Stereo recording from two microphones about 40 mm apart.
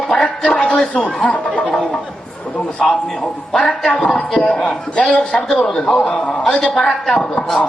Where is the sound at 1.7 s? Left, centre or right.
Left.